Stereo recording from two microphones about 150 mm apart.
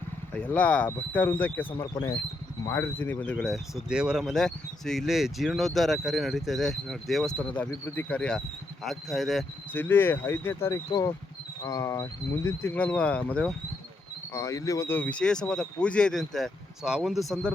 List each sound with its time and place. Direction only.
0.3 s speech: 10° left (ahead or behind)
9.7 s speech: 15° left (ahead or behind)
14.3 s speech: 20° left (ahead or behind); by 17.5 s centre (ahead or behind)